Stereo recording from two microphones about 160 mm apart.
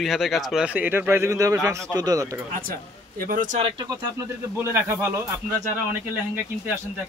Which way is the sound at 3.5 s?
35° right (ahead or behind).